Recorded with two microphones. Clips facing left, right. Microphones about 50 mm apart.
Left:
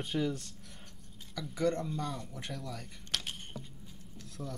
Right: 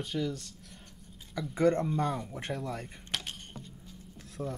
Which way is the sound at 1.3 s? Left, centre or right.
Right.